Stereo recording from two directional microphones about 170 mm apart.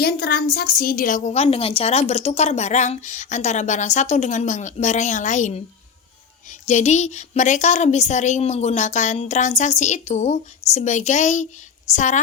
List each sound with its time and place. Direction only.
0.0 s a woman's voice: 65° left (ahead or behind); by 12.2 s 45° left (ahead or behind)